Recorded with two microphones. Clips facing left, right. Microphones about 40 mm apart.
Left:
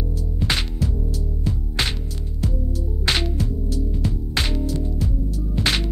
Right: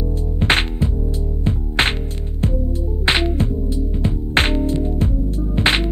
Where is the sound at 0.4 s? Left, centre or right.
Right.